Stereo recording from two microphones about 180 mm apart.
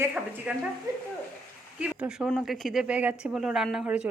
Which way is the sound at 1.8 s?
5° right (ahead or behind).